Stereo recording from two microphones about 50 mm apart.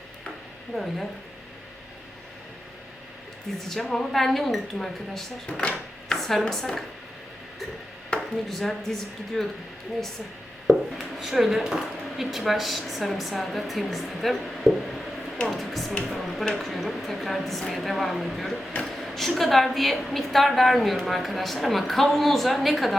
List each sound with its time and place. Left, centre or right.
0.7 s speech: centre
3.7 s speech: centre
5.5 s a woman's voice: centre
6.1 s a sound: centre
6.5 s a woman's voice: centre
8.1 s a sound: left
8.4 s speech: centre
10.7 s speech: centre
18.9 s a sound: centre
19.4 s speech: centre